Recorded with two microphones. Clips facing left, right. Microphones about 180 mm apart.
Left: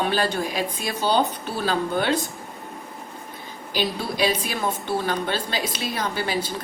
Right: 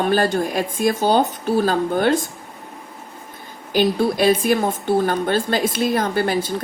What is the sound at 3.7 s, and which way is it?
Speech, 50° right (ahead or behind).